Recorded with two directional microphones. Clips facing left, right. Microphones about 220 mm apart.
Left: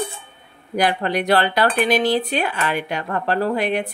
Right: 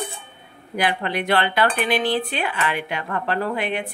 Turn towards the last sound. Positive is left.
turn(degrees=40)  # may be behind; listen again after turning